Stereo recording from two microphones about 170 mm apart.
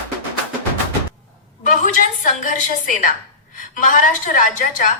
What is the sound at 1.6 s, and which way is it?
A woman's voice, 50° left (ahead or behind).